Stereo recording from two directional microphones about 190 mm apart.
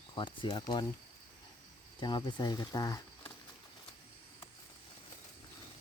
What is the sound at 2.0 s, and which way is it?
Speech, 25° left (ahead or behind).